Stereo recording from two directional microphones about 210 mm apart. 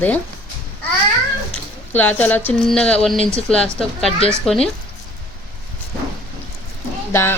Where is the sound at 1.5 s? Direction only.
10° left (ahead or behind).